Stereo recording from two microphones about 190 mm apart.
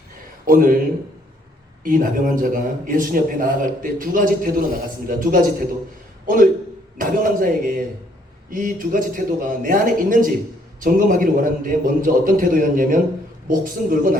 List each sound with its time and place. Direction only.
0.4 s a man's voice: 45° right (ahead or behind)
1.8 s a man's voice: 45° right (ahead or behind)